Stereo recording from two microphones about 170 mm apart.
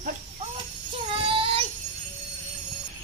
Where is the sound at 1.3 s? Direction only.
30° right (ahead or behind).